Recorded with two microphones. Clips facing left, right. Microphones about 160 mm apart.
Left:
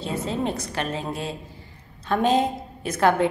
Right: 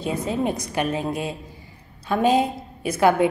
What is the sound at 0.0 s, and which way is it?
A woman's voice, 15° right (ahead or behind).